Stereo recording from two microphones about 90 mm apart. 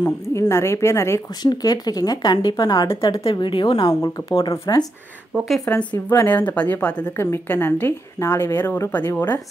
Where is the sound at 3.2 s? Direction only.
80° left; by 4.8 s 50° left (ahead or behind).